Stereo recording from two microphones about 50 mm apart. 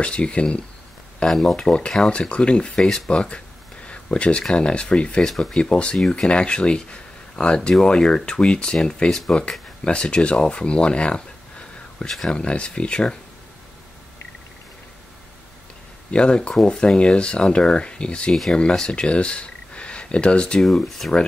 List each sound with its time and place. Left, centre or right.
0.0 s speech: left
1.2 s speech: centre
12.0 s speech: centre
12.3 s speech: left
16.1 s speech: centre
20.6 s speech: centre